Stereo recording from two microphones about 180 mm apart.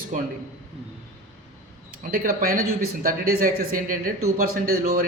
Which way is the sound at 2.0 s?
55° right (ahead or behind).